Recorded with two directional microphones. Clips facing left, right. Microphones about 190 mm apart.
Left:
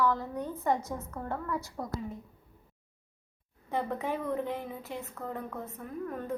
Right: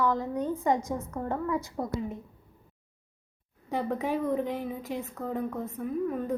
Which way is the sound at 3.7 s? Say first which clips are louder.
Right 3 dB; 15° right (ahead or behind).